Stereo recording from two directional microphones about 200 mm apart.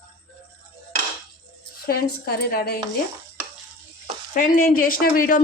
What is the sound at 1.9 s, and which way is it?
Speech, 50° left (ahead or behind).